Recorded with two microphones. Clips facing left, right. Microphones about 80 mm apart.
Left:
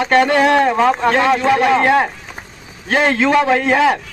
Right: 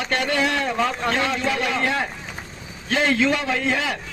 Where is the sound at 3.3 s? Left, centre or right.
Left.